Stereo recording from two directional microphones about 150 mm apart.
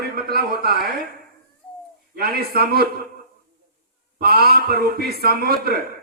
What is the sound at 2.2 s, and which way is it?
Speech, 90° right.